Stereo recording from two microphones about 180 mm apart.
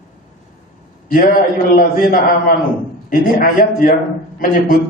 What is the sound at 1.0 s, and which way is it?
A man's voice, 55° left (ahead or behind).